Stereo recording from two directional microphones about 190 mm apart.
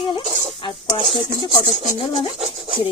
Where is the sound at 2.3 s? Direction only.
30° right (ahead or behind).